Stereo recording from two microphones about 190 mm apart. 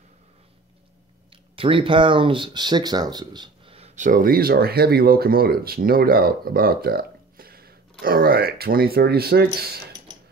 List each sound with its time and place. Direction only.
1.3 s speech: 30° right (ahead or behind); by 9.8 s 55° right (ahead or behind)